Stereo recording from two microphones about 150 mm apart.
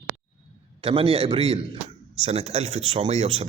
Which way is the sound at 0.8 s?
40° right (ahead or behind).